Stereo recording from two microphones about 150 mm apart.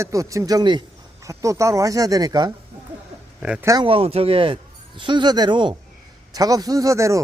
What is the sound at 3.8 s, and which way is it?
A man's voice, 40° right (ahead or behind).